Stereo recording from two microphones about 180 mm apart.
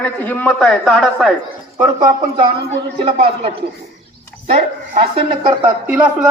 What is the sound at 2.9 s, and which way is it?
A woman's voice, 30° right (ahead or behind).